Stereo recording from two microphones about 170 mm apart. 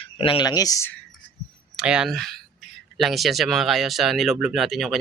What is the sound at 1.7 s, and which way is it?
Speech, 5° right (ahead or behind).